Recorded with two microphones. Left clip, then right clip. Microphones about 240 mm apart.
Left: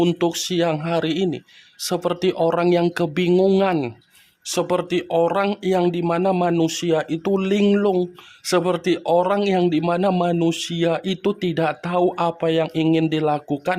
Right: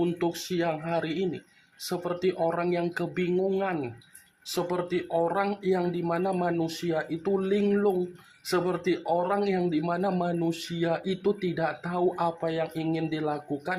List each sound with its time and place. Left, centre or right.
0.0 s speech: left